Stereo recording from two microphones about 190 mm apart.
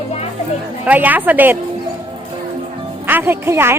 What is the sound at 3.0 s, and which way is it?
Speech, 10° right (ahead or behind).